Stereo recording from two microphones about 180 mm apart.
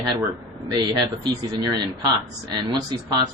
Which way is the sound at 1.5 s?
25° right (ahead or behind).